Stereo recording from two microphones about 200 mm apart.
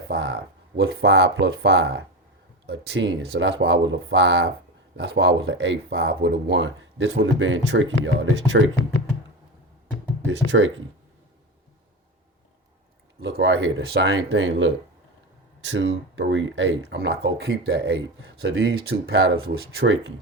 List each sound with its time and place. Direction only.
0.1 s speech: 55° right (ahead or behind)
10.2 s speech: 70° right (ahead or behind)
13.3 s speech: 60° right (ahead or behind)